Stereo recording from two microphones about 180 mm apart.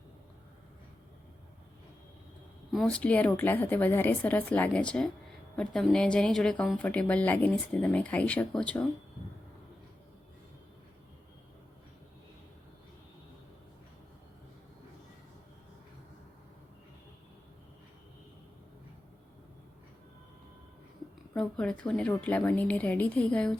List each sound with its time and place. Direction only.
2.7 s speech: 5° left (ahead or behind)
21.3 s speech: 5° left (ahead or behind)